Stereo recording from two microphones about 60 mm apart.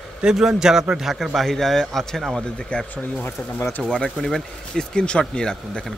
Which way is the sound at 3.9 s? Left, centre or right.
Centre.